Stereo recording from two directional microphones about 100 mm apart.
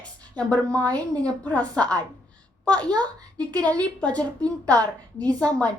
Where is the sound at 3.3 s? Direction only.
35° right (ahead or behind).